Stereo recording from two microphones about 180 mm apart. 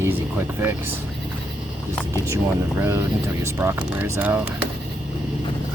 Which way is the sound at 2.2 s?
15° right (ahead or behind).